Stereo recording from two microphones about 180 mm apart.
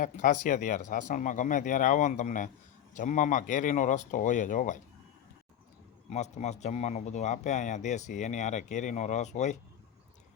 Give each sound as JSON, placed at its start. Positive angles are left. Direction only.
{"t": 0.0, "sound": "speech", "side_deg": 45}
{"t": 6.1, "sound": "speech", "side_deg": 40}